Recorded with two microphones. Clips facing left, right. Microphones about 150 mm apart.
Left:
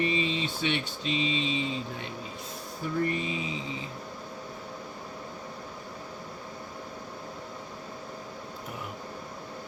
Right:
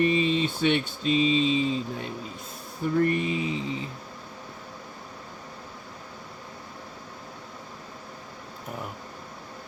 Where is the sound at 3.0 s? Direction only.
60° right (ahead or behind).